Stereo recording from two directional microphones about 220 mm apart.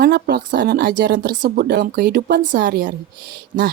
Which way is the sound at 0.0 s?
45° right (ahead or behind).